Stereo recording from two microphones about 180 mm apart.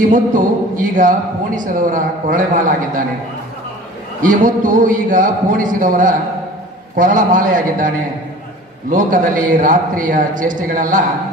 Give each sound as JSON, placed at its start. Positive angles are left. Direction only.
{"t": 0.1, "sound": "speech", "side_deg": -45}
{"t": 4.2, "sound": "speech", "side_deg": -45}